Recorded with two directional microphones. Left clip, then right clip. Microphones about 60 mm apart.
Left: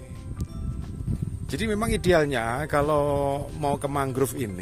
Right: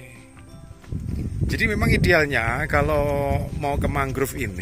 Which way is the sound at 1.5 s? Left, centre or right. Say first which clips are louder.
Right 5 dB; left.